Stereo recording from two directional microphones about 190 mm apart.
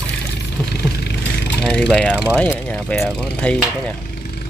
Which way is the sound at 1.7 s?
5° left (ahead or behind).